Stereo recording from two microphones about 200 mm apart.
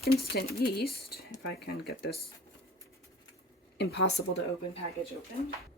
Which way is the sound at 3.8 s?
60° left (ahead or behind).